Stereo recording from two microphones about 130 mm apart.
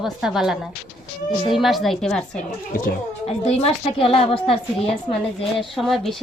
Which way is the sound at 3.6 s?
50° left (ahead or behind).